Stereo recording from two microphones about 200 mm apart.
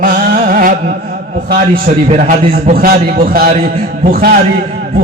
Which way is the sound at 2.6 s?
45° right (ahead or behind).